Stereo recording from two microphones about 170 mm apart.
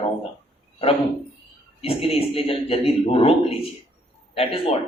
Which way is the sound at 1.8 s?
35° left (ahead or behind).